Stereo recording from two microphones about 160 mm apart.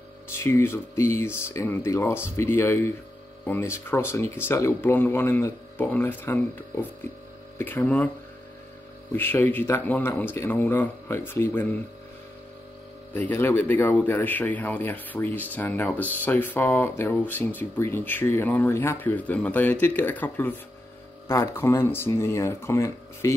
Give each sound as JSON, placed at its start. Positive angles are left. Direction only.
{"t": 0.3, "sound": "speech", "side_deg": 15}
{"t": 9.1, "sound": "speech", "side_deg": 10}
{"t": 13.1, "sound": "speech", "side_deg": 10}